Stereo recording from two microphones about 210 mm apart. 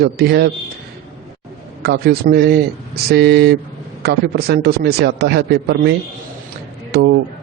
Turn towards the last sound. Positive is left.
turn(degrees=-50)  # may be behind; listen again after turning